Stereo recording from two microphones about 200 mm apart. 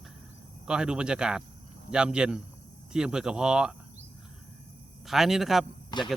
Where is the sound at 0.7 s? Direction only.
5° right (ahead or behind).